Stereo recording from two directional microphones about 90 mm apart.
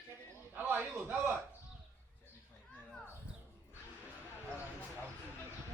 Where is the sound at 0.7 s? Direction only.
25° right (ahead or behind).